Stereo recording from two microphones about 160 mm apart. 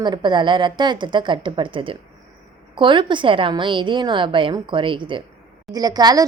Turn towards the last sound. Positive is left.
turn(degrees=-25)  # may be behind; listen again after turning